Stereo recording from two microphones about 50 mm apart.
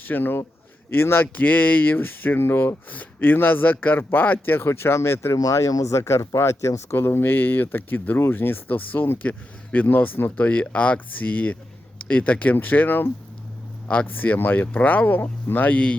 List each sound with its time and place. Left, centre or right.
0.0 s a man's voice: left
1.4 s speech: left
2.9 s speech: left
4.7 s speech: left
6.9 s speech: left
9.7 s speech: left
10.3 s speech: left
14.2 s speech: left
14.7 s speech: left